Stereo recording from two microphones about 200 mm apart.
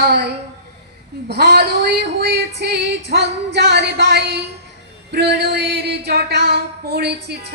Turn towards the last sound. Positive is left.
turn(degrees=-55)  # may be behind; listen again after turning